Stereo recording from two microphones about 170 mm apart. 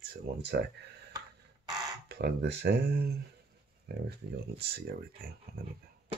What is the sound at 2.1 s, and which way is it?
Speech, 80° right.